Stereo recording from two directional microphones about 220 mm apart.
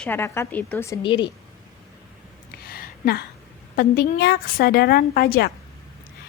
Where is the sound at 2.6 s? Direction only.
45° left (ahead or behind).